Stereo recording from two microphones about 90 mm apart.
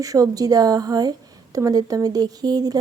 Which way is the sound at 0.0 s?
40° right (ahead or behind).